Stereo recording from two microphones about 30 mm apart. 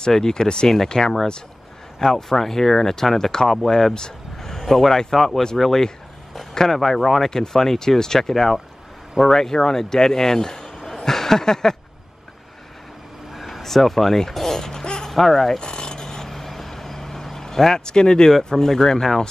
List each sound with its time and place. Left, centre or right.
0.0 s speech: left
3.4 s speech: centre
7.0 s speech: centre
7.2 s speech: centre
11.0 s a sound: centre
13.3 s speech: centre
14.7 s a sound: left
15.0 s speech: centre
15.6 s filing: left
16.3 s vehicle: centre; by 18.3 s left
18.4 s speech: centre